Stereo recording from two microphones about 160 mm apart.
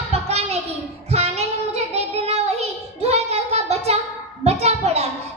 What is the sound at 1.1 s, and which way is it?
Child singing, 40° right (ahead or behind).